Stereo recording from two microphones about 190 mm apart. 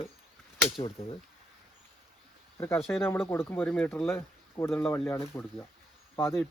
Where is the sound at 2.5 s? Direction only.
10° left (ahead or behind).